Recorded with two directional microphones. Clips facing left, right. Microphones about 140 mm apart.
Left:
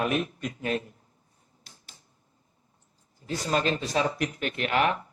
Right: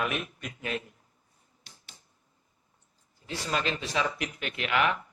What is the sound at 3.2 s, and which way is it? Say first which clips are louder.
Speech: left 4 dB; 40° left (ahead or behind).